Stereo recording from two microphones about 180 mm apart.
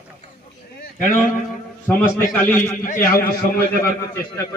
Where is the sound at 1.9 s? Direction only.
5° left (ahead or behind).